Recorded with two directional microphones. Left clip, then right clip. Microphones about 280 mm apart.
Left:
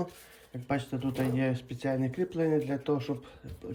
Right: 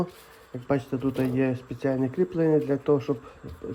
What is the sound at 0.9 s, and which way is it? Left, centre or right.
A man's voice, centre.